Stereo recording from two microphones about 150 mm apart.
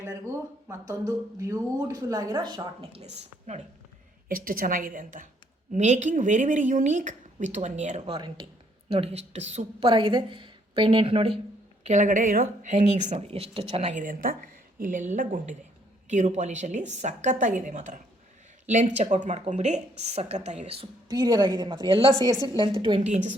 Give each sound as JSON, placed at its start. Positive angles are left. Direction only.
{"t": 0.7, "sound": "a woman's voice", "side_deg": -20}
{"t": 2.9, "sound": "speech", "side_deg": -50}
{"t": 4.3, "sound": "a woman's voice", "side_deg": -70}
{"t": 8.0, "sound": "a woman's voice", "side_deg": -30}
{"t": 9.8, "sound": "a woman's voice", "side_deg": -30}
{"t": 11.9, "sound": "speech", "side_deg": -55}
{"t": 14.0, "sound": "a woman's voice", "side_deg": -65}
{"t": 21.1, "sound": "a woman's voice", "side_deg": -25}
{"t": 23.0, "sound": "speech", "side_deg": -50}